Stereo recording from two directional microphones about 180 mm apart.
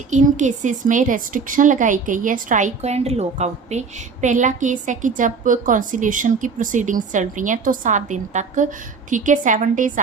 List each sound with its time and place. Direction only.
0.1 s a woman's voice: 40° right (ahead or behind)